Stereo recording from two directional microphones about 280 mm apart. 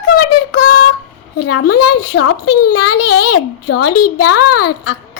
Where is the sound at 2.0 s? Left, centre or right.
Left.